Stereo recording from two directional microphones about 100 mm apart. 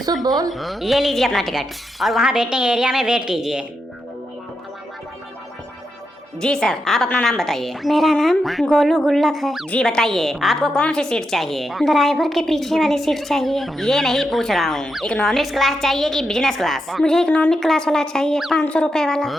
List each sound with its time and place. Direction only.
0.3 s speech: 40° right (ahead or behind)
0.5 s a woman's voice: centre (ahead or behind)
6.4 s a woman's voice: 5° left (ahead or behind)
9.6 s a woman's voice: 10° left (ahead or behind)